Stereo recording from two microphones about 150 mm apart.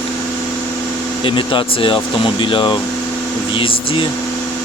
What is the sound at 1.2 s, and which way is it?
Speech, 35° left (ahead or behind).